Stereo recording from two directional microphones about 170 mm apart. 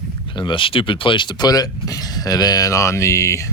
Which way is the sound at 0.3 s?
30° left (ahead or behind).